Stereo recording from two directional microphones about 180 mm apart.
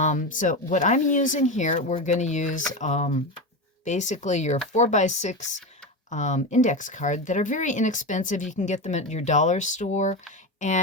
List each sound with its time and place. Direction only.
0.0 s speech: 40° left (ahead or behind)